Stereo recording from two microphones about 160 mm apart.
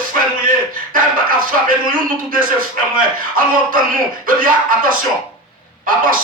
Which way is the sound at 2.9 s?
60° right (ahead or behind).